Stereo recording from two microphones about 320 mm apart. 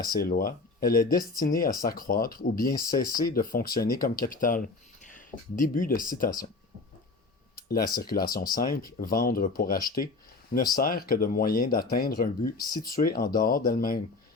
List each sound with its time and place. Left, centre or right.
0.2 s speech: left
7.7 s speech: left
12.5 s speech: centre
12.8 s speech: left